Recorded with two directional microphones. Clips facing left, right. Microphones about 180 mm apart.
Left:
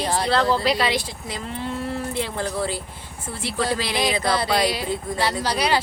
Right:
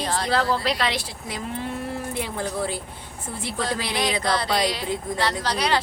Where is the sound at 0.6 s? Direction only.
Centre (ahead or behind); by 2.8 s 15° right (ahead or behind).